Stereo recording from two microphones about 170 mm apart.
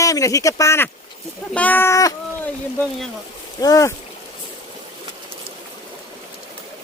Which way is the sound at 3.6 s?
20° left (ahead or behind).